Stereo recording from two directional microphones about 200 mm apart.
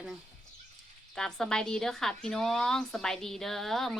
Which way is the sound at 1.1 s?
5° left (ahead or behind).